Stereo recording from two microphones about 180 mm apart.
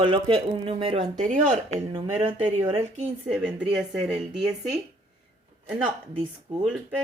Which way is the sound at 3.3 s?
5° right (ahead or behind).